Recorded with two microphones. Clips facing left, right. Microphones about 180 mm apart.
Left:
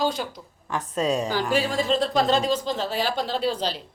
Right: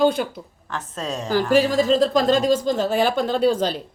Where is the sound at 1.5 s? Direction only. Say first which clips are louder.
Right 7 dB; 45° right (ahead or behind).